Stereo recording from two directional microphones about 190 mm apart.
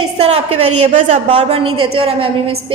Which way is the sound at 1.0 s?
35° right (ahead or behind).